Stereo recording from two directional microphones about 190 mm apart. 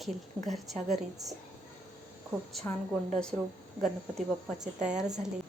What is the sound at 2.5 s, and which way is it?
Speech, centre (ahead or behind).